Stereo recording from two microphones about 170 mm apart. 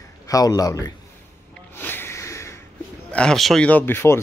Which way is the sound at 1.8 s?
10° left (ahead or behind).